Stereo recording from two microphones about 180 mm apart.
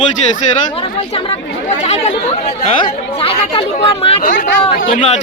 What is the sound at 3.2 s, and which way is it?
Speech, 30° left (ahead or behind).